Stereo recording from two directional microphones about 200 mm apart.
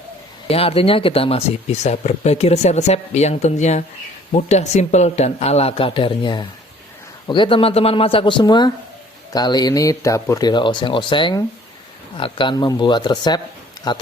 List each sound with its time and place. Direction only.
0.4 s speech: 30° left (ahead or behind)